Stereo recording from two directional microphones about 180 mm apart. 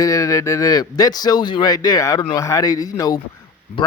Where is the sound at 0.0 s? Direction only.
20° left (ahead or behind).